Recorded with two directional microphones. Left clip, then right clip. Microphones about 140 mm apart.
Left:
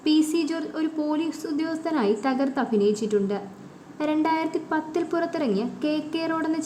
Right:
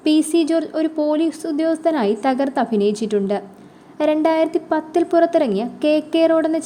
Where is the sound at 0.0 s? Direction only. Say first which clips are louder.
Right 6 dB; 35° right (ahead or behind).